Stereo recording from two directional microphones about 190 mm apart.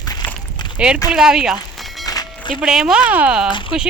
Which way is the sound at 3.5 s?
25° left (ahead or behind).